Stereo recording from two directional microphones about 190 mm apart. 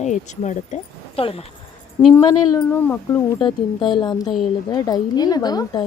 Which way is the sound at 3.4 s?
25° left (ahead or behind).